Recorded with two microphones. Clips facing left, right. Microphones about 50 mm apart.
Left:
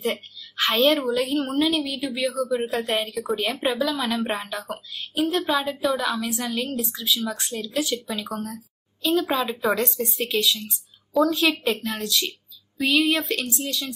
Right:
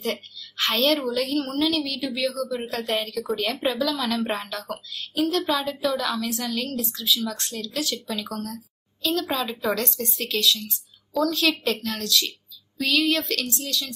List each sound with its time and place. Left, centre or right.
0.0 s a woman's voice: centre
3.8 s a woman's voice: centre
4.2 s a woman's voice: centre